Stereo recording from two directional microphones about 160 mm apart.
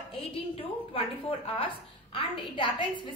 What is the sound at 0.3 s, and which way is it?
Speech, 35° left (ahead or behind).